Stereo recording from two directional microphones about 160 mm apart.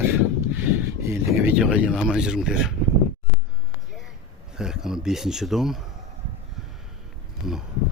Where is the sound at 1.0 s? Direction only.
15° right (ahead or behind).